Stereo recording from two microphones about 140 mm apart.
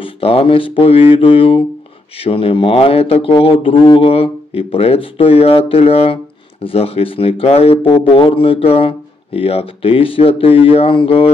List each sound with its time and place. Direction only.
0.0 s speech: 45° left (ahead or behind)